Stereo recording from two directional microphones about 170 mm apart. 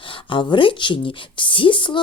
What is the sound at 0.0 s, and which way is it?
Speech, 30° left (ahead or behind).